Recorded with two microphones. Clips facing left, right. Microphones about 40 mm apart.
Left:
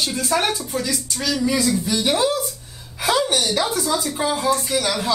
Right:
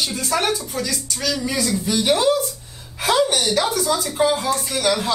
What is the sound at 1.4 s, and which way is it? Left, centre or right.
Speech, centre.